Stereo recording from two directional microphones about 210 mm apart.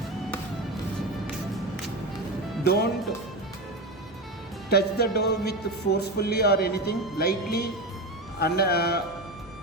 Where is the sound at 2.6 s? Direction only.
50° left (ahead or behind).